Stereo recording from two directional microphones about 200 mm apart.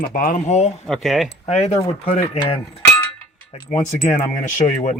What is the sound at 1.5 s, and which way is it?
Speech, 30° left (ahead or behind).